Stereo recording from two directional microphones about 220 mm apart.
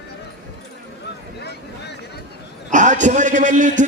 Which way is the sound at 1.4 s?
50° left (ahead or behind).